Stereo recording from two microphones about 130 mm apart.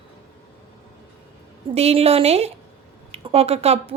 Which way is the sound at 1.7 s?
50° right (ahead or behind).